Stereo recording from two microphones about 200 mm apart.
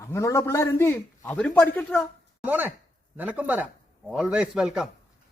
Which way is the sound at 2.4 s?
10° right (ahead or behind).